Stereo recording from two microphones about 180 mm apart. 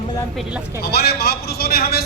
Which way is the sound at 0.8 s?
60° left (ahead or behind).